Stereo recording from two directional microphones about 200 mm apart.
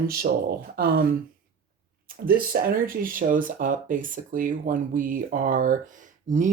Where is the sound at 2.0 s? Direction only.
45° right (ahead or behind).